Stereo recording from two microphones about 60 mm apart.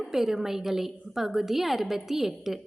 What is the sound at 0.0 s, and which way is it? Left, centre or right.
A woman's voice, centre.